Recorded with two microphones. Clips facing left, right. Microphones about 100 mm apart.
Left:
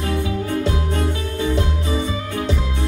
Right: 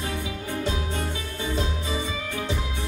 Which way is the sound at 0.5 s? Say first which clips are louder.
Left 6 dB; 60° left (ahead or behind).